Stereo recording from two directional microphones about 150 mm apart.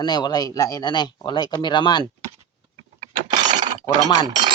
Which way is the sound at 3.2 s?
30° right (ahead or behind).